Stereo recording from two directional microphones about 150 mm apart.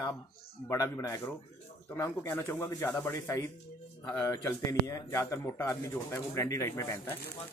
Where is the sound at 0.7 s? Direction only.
20° left (ahead or behind).